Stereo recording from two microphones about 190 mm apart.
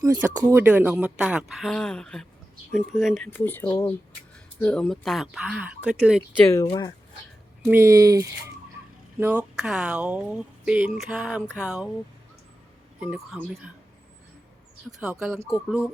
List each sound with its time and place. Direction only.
0.1 s speech: 10° right (ahead or behind)
3.2 s speech: 10° left (ahead or behind)
6.7 s speech: 20° left (ahead or behind)
7.7 s speech: 15° right (ahead or behind)
13.0 s speech: 5° right (ahead or behind)
14.8 s speech: 5° right (ahead or behind)